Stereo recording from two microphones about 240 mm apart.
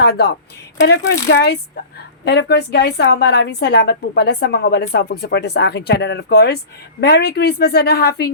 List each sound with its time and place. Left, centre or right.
0.0 s a woman's voice: left